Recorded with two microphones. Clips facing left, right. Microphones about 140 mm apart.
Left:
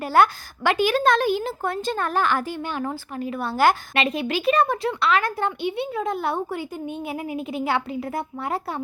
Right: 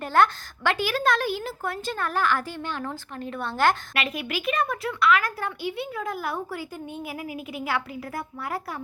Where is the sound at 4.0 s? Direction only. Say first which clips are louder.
Left 6 dB; 30° left (ahead or behind).